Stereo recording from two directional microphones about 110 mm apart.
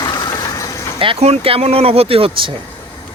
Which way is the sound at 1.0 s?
60° right (ahead or behind).